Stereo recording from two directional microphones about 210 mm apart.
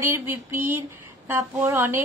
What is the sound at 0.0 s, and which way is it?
Speech, 10° right (ahead or behind).